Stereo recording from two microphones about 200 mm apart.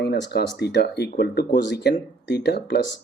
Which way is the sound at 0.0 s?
55° left (ahead or behind).